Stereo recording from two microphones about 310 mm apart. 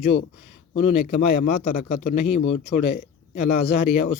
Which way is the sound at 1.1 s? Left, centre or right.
Left.